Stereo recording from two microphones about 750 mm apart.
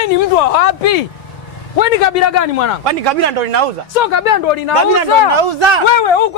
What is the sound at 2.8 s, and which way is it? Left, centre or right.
Speech, right.